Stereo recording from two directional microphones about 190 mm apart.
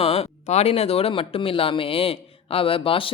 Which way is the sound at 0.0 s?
30° left (ahead or behind).